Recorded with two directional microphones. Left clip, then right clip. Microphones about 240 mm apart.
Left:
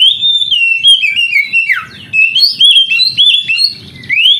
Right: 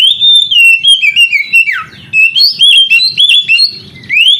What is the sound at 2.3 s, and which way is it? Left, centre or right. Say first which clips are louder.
Bird: even; centre.